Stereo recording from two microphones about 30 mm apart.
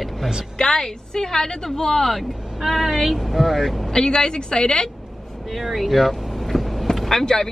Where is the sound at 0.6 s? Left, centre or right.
Left.